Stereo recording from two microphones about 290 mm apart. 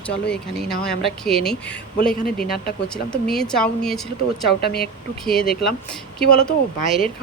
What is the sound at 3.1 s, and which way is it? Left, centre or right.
Speech, centre.